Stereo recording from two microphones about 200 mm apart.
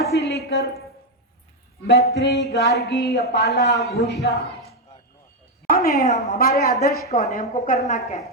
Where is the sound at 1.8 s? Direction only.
55° left (ahead or behind).